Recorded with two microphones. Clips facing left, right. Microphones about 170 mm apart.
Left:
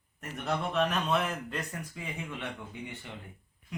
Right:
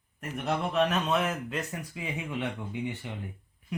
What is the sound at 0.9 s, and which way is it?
Speech, centre (ahead or behind).